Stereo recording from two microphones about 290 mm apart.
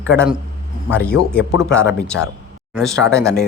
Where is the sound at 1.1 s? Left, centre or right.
Left.